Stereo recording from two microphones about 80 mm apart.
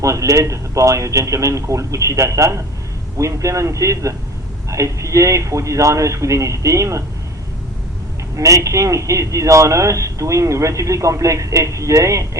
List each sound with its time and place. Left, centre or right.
0.0 s speech: right
8.4 s speech: right